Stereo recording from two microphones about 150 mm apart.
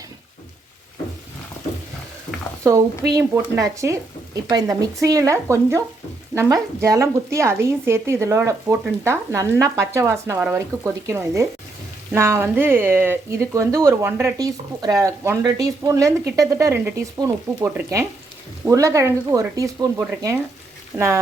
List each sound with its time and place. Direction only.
3.2 s speech: 20° right (ahead or behind)